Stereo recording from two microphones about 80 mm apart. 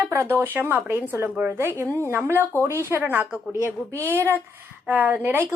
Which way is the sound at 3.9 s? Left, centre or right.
Left.